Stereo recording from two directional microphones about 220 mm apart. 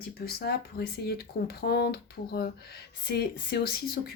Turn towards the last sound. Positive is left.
turn(degrees=45)  # may be behind; listen again after turning